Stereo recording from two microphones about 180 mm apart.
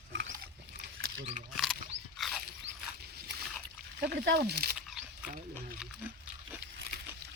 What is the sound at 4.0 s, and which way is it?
Speech, 65° right (ahead or behind).